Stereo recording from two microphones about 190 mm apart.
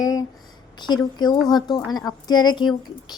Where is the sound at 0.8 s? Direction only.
20° left (ahead or behind).